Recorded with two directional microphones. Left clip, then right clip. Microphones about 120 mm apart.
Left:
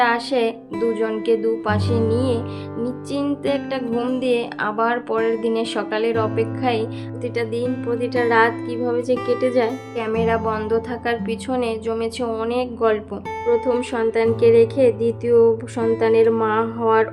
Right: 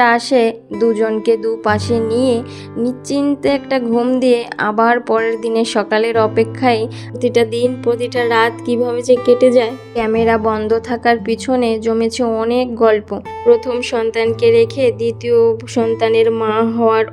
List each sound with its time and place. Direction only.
0.0 s a woman's voice: 60° right (ahead or behind); by 12.5 s 45° right (ahead or behind)
12.5 s a woman's voice: 55° right (ahead or behind)